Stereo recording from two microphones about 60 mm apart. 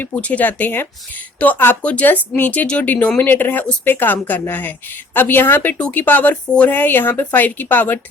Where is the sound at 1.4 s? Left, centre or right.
Left.